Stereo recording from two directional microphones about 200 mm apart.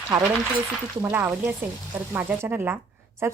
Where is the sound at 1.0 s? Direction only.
10° right (ahead or behind).